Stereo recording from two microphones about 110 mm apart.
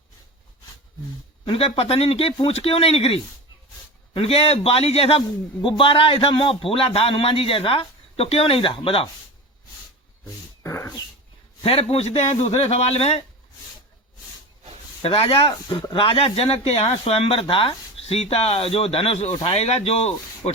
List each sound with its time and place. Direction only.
1.5 s a man's voice: 60° left (ahead or behind)
5.6 s a man's voice: 50° left (ahead or behind)
10.6 s dog: 20° left (ahead or behind)
11.6 s a man's voice: 65° left (ahead or behind)
15.0 s a man's voice: 60° left (ahead or behind)
17.4 s a man's voice: 50° left (ahead or behind); by 20.5 s 80° left